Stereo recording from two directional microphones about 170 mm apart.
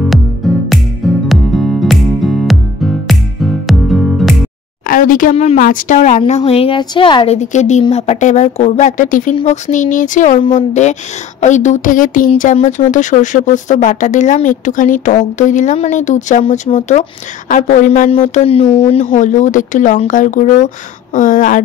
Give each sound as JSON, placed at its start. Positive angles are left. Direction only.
{"t": 0.7, "sound": "music", "side_deg": 0}
{"t": 4.8, "sound": "speech", "side_deg": 55}
{"t": 5.3, "sound": "a woman's voice", "side_deg": 40}
{"t": 5.6, "sound": "a woman's voice", "side_deg": 50}
{"t": 7.3, "sound": "a woman's voice", "side_deg": 45}